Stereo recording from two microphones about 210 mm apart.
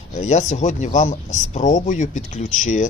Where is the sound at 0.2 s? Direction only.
35° left (ahead or behind).